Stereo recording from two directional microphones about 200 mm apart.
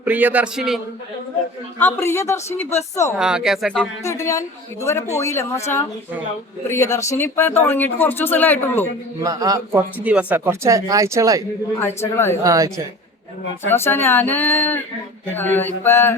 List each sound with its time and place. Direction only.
0.0 s speech: 10° right (ahead or behind)
1.8 s speech: 10° left (ahead or behind)
3.1 s speech: 5° right (ahead or behind)
4.0 s speech: 15° left (ahead or behind)
9.2 s a man's voice: 20° right (ahead or behind)
10.0 s speech: 5° right (ahead or behind)
11.8 s speech: 10° left (ahead or behind)
12.4 s speech: 15° right (ahead or behind)
13.7 s speech: 10° left (ahead or behind)